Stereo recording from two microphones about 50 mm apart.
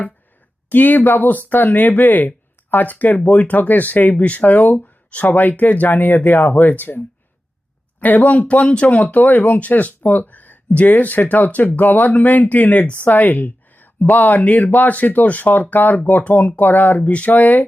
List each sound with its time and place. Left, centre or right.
0.7 s speech: left
8.0 s speech: left